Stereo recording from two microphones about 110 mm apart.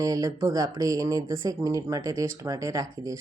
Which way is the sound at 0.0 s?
35° right (ahead or behind).